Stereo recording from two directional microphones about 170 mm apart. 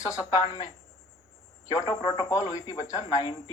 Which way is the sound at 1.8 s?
30° left (ahead or behind).